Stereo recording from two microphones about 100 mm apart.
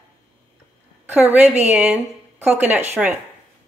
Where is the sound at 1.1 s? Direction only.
15° right (ahead or behind).